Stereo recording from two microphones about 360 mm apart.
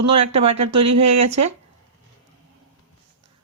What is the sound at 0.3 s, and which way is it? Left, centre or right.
Speech, centre.